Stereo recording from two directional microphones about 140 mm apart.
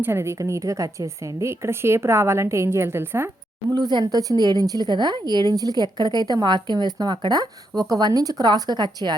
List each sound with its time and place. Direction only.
0.0 s a woman's voice: 20° right (ahead or behind)
3.8 s a woman's voice: 30° right (ahead or behind)